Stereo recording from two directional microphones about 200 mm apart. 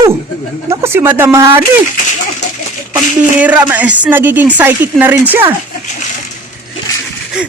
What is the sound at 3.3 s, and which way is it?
Speech, 10° right (ahead or behind).